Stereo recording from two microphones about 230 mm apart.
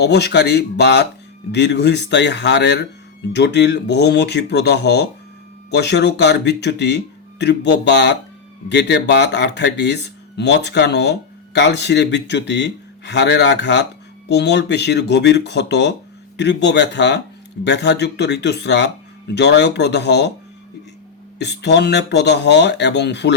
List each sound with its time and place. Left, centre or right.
0.0 s speech: left
21.3 s speech: left